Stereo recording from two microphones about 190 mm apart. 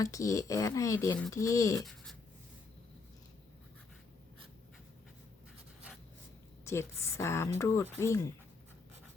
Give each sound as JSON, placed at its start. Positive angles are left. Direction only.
{"t": 0.0, "sound": "speech", "side_deg": 15}
{"t": 6.7, "sound": "speech", "side_deg": 15}